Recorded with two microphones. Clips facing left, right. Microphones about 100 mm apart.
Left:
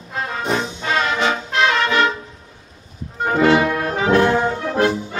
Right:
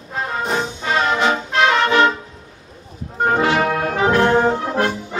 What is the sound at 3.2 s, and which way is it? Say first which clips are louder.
Music: left 2 dB; 45° right (ahead or behind).